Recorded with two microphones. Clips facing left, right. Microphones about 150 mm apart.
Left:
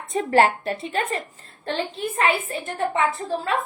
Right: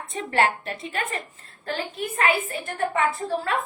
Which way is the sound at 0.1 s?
40° left (ahead or behind).